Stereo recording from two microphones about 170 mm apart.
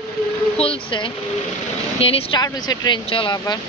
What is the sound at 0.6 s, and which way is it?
Speech, 30° left (ahead or behind).